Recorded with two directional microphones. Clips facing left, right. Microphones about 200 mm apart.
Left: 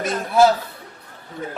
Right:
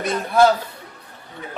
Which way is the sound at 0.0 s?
Centre (ahead or behind).